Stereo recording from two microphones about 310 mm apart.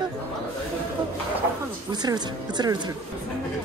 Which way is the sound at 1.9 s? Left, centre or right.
Centre.